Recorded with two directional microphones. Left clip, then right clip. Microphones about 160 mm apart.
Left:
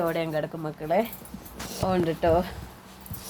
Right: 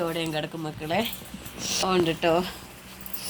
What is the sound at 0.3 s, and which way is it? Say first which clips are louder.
Speech: left 1 dB; 40° left (ahead or behind).